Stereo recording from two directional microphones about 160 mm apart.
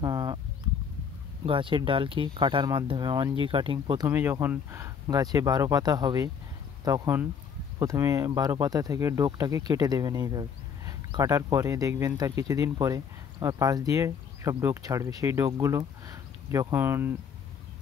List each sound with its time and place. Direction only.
0.0 s a sound: 25° right (ahead or behind)
1.4 s speech: 35° right (ahead or behind)
4.1 s speech: 15° right (ahead or behind)